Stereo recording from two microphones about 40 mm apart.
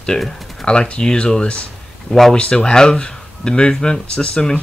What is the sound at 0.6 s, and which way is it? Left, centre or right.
Speech, left.